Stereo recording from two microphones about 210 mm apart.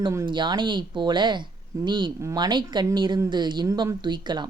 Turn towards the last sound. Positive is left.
turn(degrees=-20)  # may be behind; listen again after turning